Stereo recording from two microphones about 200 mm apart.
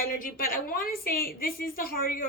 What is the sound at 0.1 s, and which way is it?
A woman's voice, 45° left (ahead or behind).